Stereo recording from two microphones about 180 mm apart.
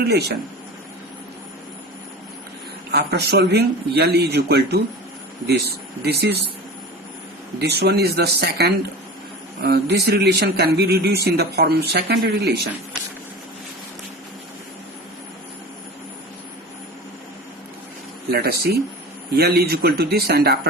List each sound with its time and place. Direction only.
0.0 s a man's voice: 65° right (ahead or behind)
2.9 s a man's voice: 65° right (ahead or behind)
7.6 s a man's voice: 65° right (ahead or behind)
18.3 s a man's voice: 60° right (ahead or behind)